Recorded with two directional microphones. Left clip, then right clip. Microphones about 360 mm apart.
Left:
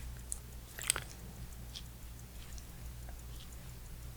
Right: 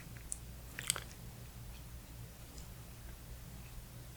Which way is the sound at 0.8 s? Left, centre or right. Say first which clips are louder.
Left 3 dB; centre.